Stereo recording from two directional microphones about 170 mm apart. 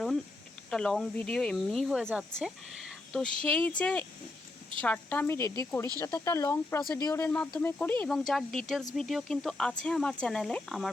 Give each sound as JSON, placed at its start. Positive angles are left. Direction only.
{"t": 0.7, "sound": "a woman's voice", "side_deg": 5}